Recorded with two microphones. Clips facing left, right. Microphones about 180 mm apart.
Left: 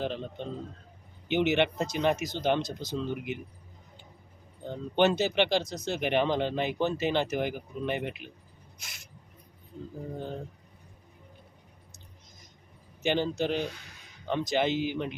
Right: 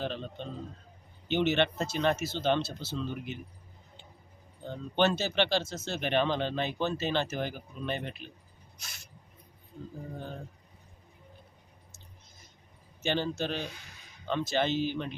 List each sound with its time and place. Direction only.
0.0 s speech: 15° left (ahead or behind)
4.6 s speech: 15° left (ahead or behind)
8.8 s a sound: 20° left (ahead or behind)
13.0 s speech: 15° left (ahead or behind)